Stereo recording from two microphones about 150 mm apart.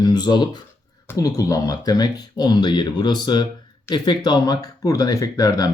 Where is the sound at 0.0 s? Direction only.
30° left (ahead or behind).